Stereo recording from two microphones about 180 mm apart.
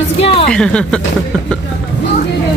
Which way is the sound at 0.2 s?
30° left (ahead or behind).